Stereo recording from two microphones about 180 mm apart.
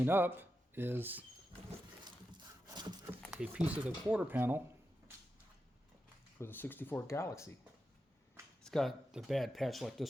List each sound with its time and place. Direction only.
0.0 s speech: 10° right (ahead or behind)
2.6 s a sound: 25° right (ahead or behind)
3.1 s speech: 5° right (ahead or behind)
6.4 s speech: 10° left (ahead or behind)
8.6 s speech: centre (ahead or behind)